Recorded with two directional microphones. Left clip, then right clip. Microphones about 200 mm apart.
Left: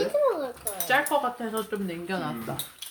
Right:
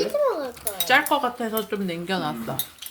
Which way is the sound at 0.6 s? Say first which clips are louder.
Right 6 dB; 35° right (ahead or behind).